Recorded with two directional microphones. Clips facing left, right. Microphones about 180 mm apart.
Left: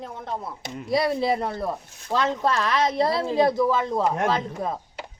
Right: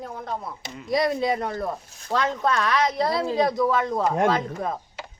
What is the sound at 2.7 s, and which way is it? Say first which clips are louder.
Speech: left 1 dB; 30° left (ahead or behind).